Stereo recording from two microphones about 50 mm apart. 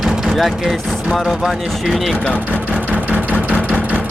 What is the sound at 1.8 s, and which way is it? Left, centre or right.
Speech, centre.